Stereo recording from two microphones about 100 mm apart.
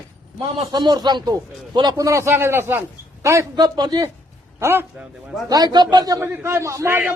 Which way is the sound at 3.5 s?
45° right (ahead or behind).